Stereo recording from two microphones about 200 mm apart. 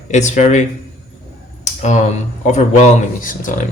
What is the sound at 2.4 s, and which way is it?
Speech, 35° left (ahead or behind).